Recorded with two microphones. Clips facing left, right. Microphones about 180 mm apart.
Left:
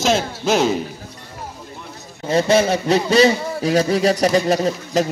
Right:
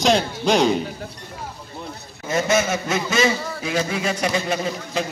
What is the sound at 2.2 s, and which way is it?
A man's voice, 30° left (ahead or behind).